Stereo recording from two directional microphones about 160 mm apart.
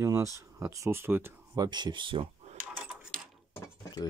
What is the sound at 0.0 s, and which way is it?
Speech, 20° right (ahead or behind).